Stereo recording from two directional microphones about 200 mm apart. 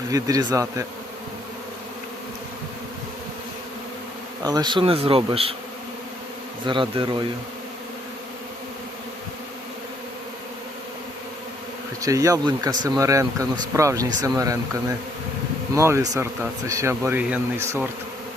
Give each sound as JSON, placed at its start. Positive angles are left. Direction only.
{"t": 0.1, "sound": "speech", "side_deg": -20}
{"t": 4.4, "sound": "speech", "side_deg": -20}
{"t": 6.7, "sound": "speech", "side_deg": -25}
{"t": 12.0, "sound": "speech", "side_deg": -15}